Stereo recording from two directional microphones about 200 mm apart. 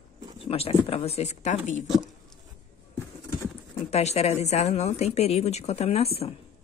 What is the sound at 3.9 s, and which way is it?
Speech, 30° left (ahead or behind).